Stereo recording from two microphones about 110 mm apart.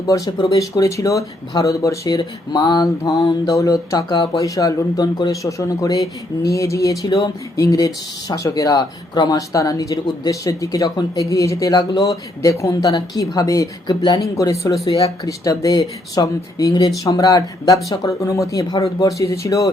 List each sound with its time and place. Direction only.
0.0 s speech: 30° left (ahead or behind)